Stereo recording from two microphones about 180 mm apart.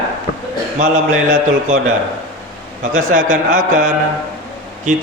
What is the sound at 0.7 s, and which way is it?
A man's voice, 45° right (ahead or behind).